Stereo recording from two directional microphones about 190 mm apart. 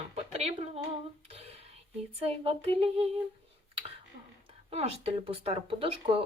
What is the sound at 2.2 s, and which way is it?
Speech, 30° right (ahead or behind).